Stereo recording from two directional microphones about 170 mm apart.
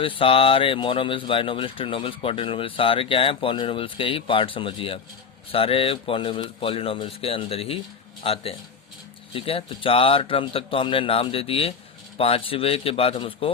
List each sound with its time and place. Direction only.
0.0 s speech: 30° left (ahead or behind)